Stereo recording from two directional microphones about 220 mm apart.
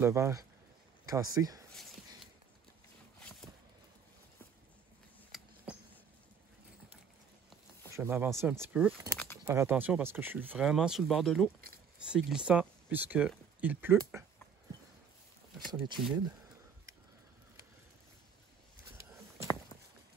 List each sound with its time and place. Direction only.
0.0 s speech: 10° right (ahead or behind)
5.3 s a sound: centre (ahead or behind)
7.9 s speech: 10° right (ahead or behind)
16.0 s speech: centre (ahead or behind)